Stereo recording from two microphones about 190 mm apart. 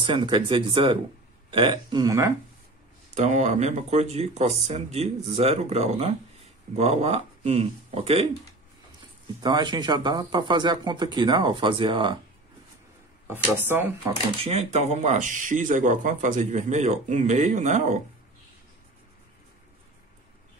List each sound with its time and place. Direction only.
0.0 s speech: 25° right (ahead or behind)
3.2 s speech: 35° right (ahead or behind)
9.4 s speech: 25° right (ahead or behind)
13.3 s speech: 10° right (ahead or behind)
14.4 s speech: 35° right (ahead or behind)